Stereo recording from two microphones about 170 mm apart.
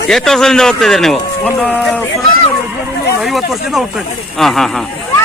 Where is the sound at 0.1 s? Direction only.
5° left (ahead or behind).